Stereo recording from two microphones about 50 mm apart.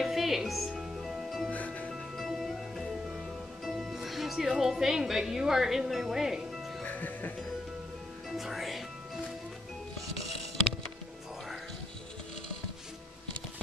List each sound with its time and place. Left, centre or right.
0.0 s music: centre
1.5 s music: left
2.1 s music: centre
3.6 s speech: centre
6.8 s music: left
8.4 s music: centre